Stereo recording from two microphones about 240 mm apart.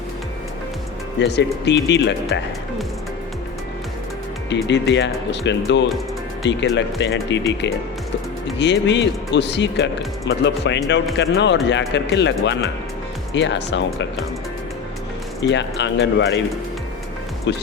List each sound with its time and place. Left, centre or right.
1.2 s speech: left
4.4 s speech: left
8.5 s speech: left
15.4 s speech: left